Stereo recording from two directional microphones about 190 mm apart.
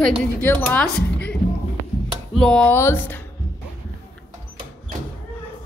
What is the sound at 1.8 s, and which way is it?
Music, 50° right (ahead or behind).